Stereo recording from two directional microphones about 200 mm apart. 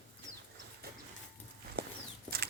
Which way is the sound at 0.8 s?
55° right (ahead or behind).